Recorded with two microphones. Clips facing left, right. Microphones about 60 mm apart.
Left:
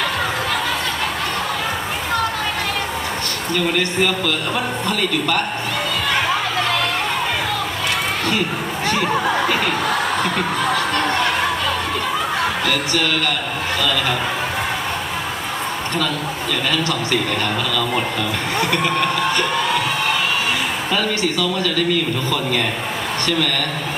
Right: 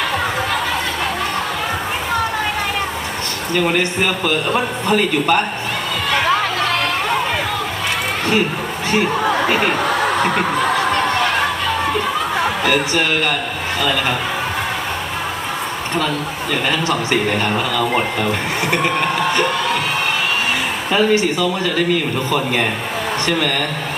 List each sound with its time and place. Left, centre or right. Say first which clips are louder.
3.6 s speech: right 2 dB; right
9.5 s a man's voice: right 3 dB; right
12.6 s a man's voice: right 3 dB; right
16.5 s a man's voice: right 3 dB; right
20.9 s a man's voice: right 7 dB; right
23.2 s a man's voice: right 1 dB; right